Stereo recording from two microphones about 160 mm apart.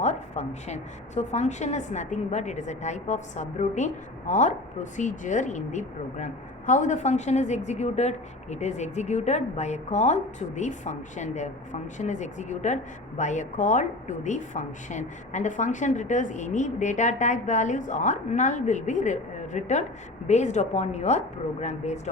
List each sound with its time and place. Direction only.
0.0 s speech: 45° left (ahead or behind)